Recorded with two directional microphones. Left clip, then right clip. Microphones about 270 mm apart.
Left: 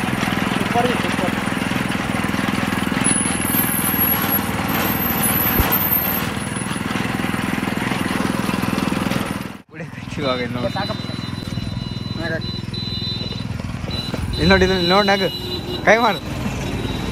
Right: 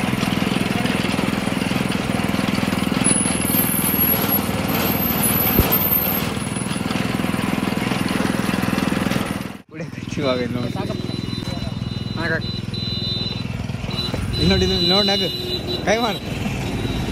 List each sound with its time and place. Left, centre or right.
0.2 s vehicle: centre
1.1 s vehicle: centre
4.9 s vehicle: centre
6.9 s vehicle: centre
8.2 s vehicle: centre
14.4 s speech: centre